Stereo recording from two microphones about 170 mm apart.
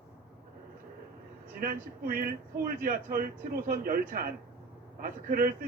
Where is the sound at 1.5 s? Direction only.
60° right (ahead or behind).